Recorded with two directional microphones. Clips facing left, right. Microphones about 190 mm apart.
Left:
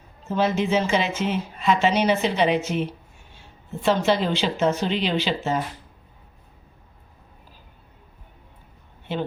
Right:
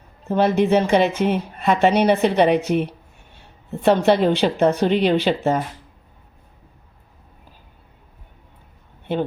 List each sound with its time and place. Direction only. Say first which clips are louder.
0.3 s a woman's voice: right 5 dB; 60° right (ahead or behind)
9.1 s a woman's voice: right 5 dB; 55° right (ahead or behind)